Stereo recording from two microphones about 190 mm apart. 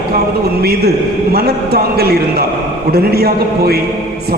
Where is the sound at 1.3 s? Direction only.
55° right (ahead or behind).